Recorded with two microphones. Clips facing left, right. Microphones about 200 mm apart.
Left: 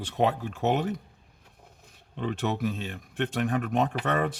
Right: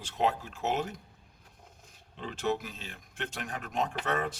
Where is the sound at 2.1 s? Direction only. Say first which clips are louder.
Left 3 dB; 60° left (ahead or behind).